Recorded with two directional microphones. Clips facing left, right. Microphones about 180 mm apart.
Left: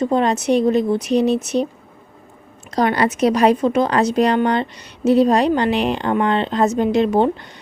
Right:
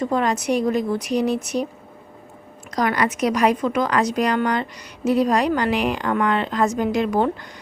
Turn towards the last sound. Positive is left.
turn(degrees=25)  # may be behind; listen again after turning